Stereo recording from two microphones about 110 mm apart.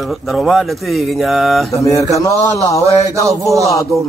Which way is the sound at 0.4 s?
Centre (ahead or behind).